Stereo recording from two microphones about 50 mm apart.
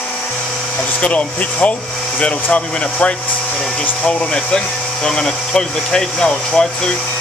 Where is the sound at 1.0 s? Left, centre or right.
Left.